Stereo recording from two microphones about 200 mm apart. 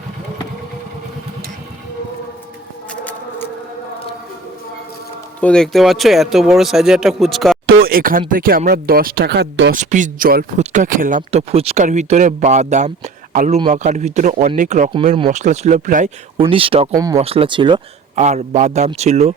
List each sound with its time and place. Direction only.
2.9 s a sound: 10° left (ahead or behind)
5.4 s speech: 5° left (ahead or behind)
7.8 s speech: 45° right (ahead or behind)
9.7 s speech: 40° right (ahead or behind)
16.4 s speech: 25° right (ahead or behind)
17.2 s speech: 30° right (ahead or behind)
18.2 s speech: 35° right (ahead or behind)